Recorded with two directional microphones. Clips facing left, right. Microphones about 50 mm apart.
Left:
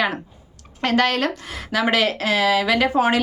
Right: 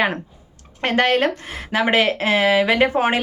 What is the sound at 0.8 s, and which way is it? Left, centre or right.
A woman's voice, right.